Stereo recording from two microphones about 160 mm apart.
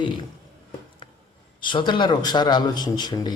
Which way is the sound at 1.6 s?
30° left (ahead or behind).